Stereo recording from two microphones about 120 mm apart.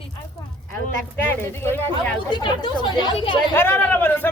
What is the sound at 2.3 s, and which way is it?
Speech, 40° left (ahead or behind).